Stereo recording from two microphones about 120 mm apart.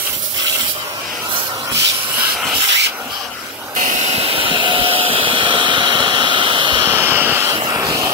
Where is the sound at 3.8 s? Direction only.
65° right (ahead or behind); by 6.9 s 40° right (ahead or behind).